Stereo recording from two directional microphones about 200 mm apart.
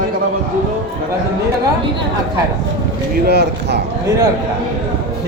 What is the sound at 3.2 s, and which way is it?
Speech, 55° right (ahead or behind).